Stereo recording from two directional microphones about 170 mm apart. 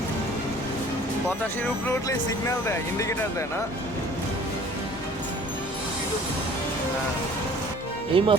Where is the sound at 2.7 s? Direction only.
15° left (ahead or behind).